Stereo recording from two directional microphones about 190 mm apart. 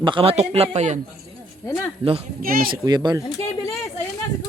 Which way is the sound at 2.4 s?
50° right (ahead or behind).